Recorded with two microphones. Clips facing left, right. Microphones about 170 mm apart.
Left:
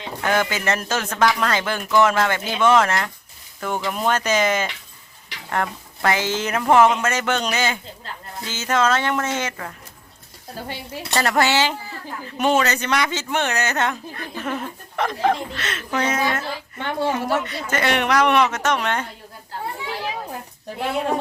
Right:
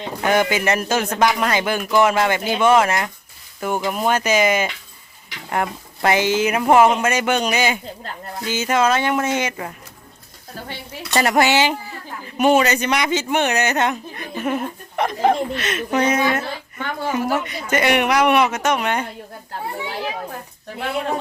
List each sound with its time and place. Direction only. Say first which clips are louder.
0.2 s speech: right 4 dB; 15° right (ahead or behind)
11.1 s speech: right 3 dB; 15° right (ahead or behind)
16.7 s a woman's voice: left 2 dB; 25° left (ahead or behind)
17.2 s speech: right 1 dB; 15° right (ahead or behind)